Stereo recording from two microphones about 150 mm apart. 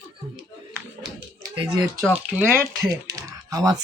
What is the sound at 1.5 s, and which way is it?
Speech, 25° right (ahead or behind).